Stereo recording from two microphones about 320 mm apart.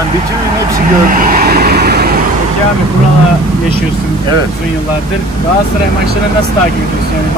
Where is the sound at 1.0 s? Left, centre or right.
Right.